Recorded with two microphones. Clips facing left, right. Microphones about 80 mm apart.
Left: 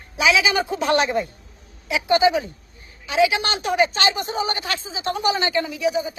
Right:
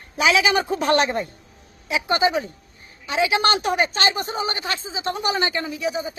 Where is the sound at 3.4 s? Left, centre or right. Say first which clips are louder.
Right 1 dB; right.